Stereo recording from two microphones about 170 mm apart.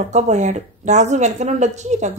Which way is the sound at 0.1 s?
45° right (ahead or behind).